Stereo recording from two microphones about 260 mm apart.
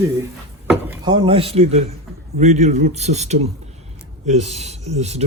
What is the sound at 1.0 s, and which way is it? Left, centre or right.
Speech, centre.